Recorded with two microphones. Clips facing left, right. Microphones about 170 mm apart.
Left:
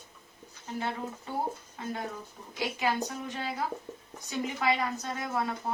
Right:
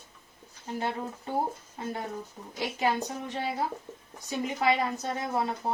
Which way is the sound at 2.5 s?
40° right (ahead or behind).